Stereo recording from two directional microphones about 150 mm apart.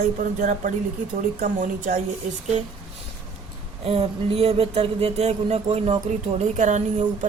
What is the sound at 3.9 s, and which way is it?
Speech, 45° right (ahead or behind).